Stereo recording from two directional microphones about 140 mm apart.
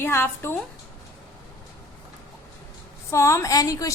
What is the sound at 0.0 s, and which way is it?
Speech, 15° left (ahead or behind).